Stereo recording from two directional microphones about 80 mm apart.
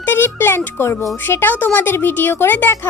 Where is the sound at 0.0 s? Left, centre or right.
Left.